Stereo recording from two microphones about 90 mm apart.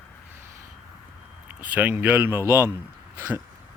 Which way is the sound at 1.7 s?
20° right (ahead or behind).